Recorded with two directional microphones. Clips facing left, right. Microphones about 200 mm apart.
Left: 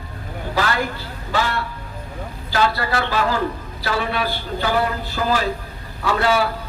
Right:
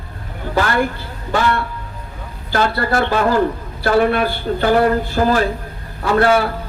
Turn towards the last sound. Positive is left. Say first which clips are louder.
# right 5 dB
turn(degrees=-55)  # may be behind; listen again after turning